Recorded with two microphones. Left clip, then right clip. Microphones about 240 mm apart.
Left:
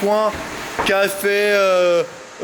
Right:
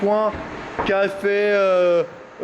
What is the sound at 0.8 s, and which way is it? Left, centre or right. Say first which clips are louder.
Speech: left 3 dB; centre.